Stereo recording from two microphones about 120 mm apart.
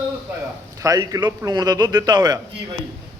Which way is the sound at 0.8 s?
30° right (ahead or behind).